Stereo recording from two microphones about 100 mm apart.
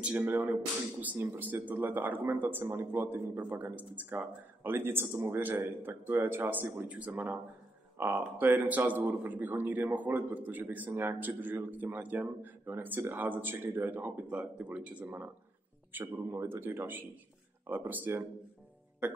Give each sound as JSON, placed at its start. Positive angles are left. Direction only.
{"t": 0.0, "sound": "a man's voice", "side_deg": -15}